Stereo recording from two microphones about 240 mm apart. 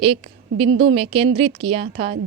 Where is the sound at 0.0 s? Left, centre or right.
Right.